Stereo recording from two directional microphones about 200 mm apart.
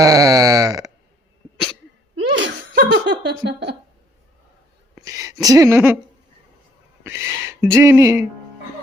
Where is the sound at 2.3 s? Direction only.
65° right (ahead or behind).